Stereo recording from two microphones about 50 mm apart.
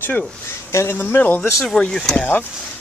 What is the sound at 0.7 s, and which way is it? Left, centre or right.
Speech, left.